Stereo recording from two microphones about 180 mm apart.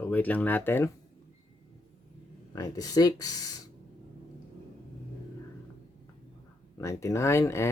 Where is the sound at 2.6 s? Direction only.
20° left (ahead or behind).